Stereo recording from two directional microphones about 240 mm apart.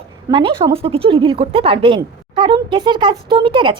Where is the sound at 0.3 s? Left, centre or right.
Centre.